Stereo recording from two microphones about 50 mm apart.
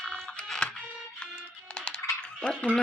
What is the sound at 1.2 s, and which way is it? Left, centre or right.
Music, centre.